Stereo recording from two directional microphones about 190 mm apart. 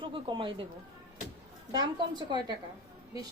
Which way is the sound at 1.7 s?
20° right (ahead or behind).